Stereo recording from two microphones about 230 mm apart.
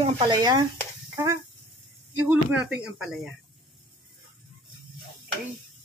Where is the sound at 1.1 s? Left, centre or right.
Centre.